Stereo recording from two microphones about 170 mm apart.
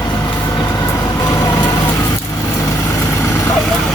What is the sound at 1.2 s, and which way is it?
Vehicle, 25° left (ahead or behind).